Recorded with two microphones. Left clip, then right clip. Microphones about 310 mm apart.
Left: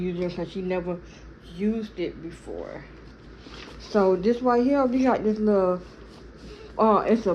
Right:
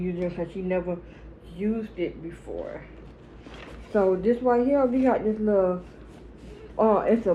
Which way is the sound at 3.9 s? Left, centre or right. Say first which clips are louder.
Left 1 dB; left.